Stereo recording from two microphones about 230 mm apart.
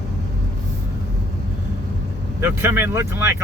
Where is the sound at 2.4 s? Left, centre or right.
Centre.